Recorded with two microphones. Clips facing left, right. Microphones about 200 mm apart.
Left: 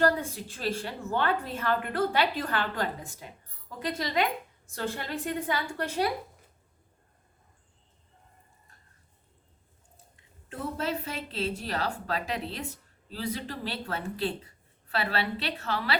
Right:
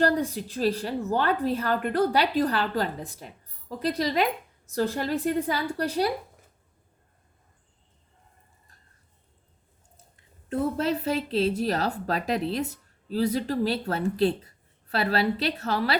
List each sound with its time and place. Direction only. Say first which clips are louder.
0.0 s a woman's voice: right 2 dB; 35° right (ahead or behind)
10.5 s a woman's voice: right 7 dB; 40° right (ahead or behind)